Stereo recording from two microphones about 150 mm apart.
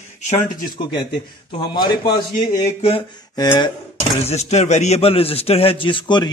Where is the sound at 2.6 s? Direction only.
40° left (ahead or behind).